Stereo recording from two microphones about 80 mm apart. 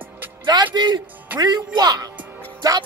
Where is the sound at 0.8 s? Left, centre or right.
Right.